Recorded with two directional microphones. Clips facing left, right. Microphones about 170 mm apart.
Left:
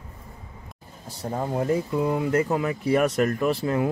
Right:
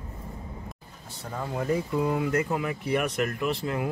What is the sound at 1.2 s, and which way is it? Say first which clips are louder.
Speech: left 4 dB; 30° left (ahead or behind).